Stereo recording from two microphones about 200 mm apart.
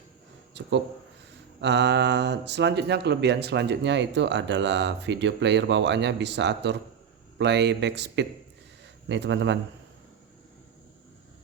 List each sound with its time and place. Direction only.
0.6 s speech: 60° right (ahead or behind)